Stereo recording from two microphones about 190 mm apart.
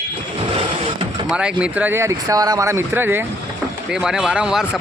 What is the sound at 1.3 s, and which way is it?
Speech, 5° right (ahead or behind).